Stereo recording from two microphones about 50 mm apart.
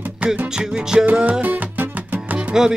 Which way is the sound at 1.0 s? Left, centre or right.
Right.